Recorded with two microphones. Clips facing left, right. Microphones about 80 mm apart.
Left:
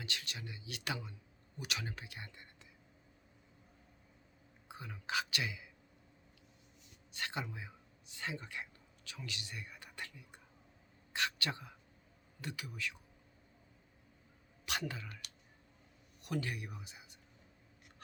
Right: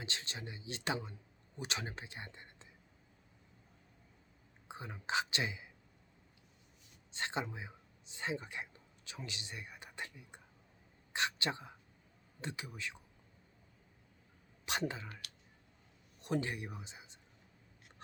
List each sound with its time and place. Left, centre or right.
0.0 s speech: right
4.7 s speech: right
7.1 s a sound: right
12.4 s speech: right
14.6 s speech: right
16.2 s speech: right